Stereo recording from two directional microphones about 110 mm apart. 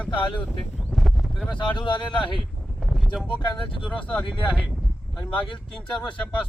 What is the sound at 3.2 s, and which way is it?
Speech, 45° left (ahead or behind).